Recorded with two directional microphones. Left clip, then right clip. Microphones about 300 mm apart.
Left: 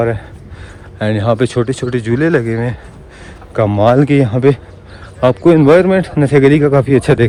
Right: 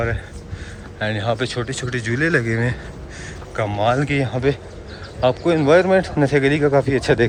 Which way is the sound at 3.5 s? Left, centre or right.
Centre.